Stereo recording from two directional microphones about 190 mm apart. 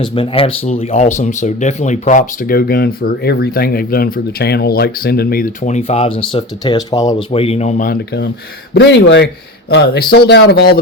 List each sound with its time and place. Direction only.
0.0 s speech: 25° left (ahead or behind)
7.3 s speech: 30° left (ahead or behind)
8.7 s speech: 65° left (ahead or behind)